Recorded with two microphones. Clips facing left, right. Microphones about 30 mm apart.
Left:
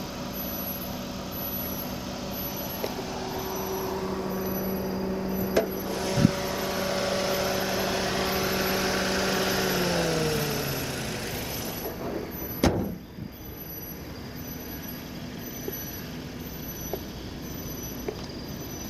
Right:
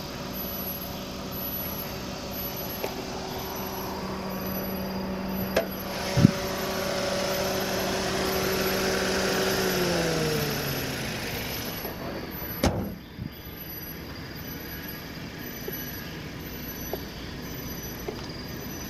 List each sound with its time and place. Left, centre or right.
0.2 s vehicle: centre
4.2 s vehicle: right
5.3 s a sound: right
5.7 s vehicle: right
6.1 s vehicle: centre; by 12.6 s right